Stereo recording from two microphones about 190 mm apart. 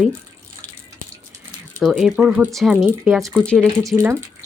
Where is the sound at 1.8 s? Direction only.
Centre (ahead or behind).